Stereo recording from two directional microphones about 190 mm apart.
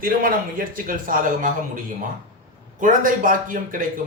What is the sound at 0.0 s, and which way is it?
Speech, 50° right (ahead or behind).